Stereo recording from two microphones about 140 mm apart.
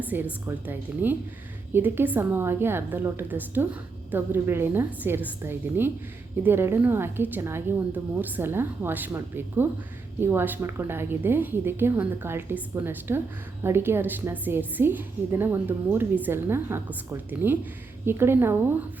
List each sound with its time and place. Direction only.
0.1 s a woman's voice: 15° right (ahead or behind)